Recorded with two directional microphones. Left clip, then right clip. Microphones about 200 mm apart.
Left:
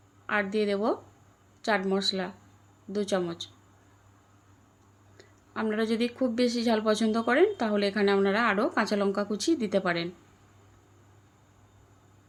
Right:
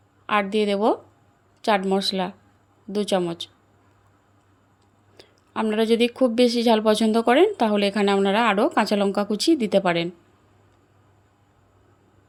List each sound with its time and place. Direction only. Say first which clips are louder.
0.3 s a woman's voice: right 6 dB; 40° right (ahead or behind)
5.1 s a woman's voice: right 7 dB; 35° right (ahead or behind)